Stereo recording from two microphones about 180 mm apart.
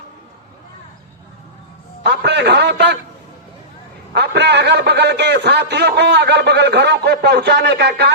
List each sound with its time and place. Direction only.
2.0 s a man's voice: 65° right (ahead or behind)
4.1 s a man's voice: 70° right (ahead or behind)